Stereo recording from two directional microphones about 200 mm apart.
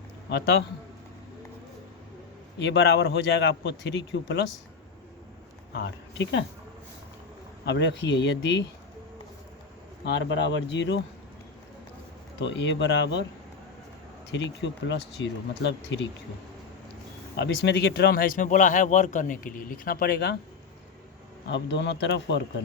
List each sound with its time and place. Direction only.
2.6 s a man's voice: 60° left (ahead or behind)
5.7 s speech: 60° left (ahead or behind)
7.6 s a man's voice: 60° left (ahead or behind)
10.0 s a man's voice: 65° left (ahead or behind)
12.4 s a man's voice: 60° left (ahead or behind)
14.3 s a man's voice: 65° left (ahead or behind)
17.3 s speech: 60° left (ahead or behind)
21.4 s a man's voice: 60° left (ahead or behind)